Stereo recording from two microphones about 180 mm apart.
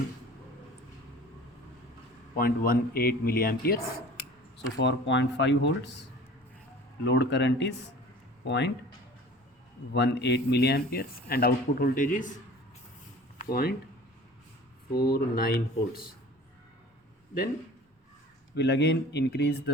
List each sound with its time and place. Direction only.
2.3 s speech: 55° left (ahead or behind)
4.5 s speech: 85° left
7.0 s speech: 75° left (ahead or behind)
9.9 s speech: 70° left (ahead or behind); by 12.3 s 45° left (ahead or behind)
13.4 s speech: 55° left (ahead or behind)
14.9 s speech: 55° left (ahead or behind)
18.5 s speech: 70° left (ahead or behind)